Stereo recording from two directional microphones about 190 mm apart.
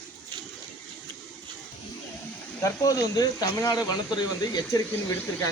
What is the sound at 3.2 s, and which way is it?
Speech, 20° left (ahead or behind).